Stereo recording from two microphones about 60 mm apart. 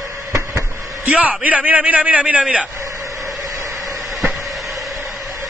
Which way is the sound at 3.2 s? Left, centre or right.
Right.